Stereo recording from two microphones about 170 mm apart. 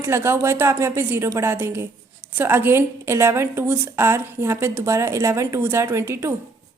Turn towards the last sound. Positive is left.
turn(degrees=-15)  # may be behind; listen again after turning